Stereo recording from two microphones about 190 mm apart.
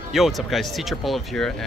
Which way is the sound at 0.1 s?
Centre (ahead or behind).